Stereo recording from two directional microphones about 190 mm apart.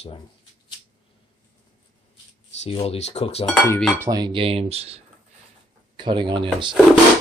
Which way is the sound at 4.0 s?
20° right (ahead or behind).